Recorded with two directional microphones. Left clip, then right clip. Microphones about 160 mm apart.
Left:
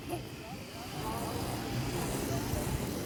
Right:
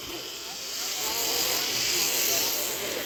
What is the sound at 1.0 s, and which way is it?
Hiss, 60° left (ahead or behind).